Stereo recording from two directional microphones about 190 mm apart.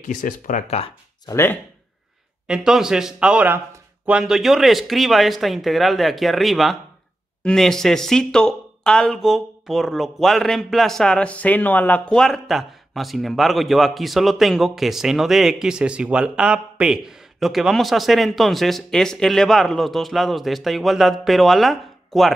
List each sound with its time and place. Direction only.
0.0 s speech: 40° left (ahead or behind)
1.2 s speech: 15° left (ahead or behind)
2.4 s speech: 5° right (ahead or behind)